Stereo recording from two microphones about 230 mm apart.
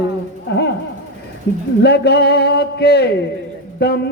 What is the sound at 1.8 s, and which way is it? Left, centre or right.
Music, left.